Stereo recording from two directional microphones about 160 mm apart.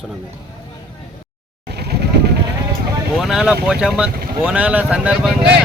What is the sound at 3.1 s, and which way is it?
Speech, 5° right (ahead or behind).